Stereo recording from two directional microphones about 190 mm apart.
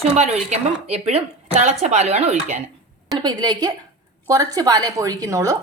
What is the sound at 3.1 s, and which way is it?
A woman's voice, 20° right (ahead or behind).